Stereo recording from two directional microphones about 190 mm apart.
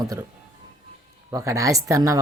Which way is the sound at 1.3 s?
15° right (ahead or behind).